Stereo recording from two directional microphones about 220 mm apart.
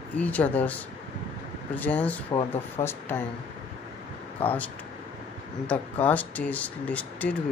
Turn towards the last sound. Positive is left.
turn(degrees=5)  # may be behind; listen again after turning